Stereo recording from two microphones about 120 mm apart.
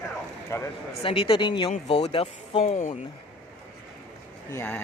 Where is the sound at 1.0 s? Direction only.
50° left (ahead or behind); by 2.9 s 75° left (ahead or behind).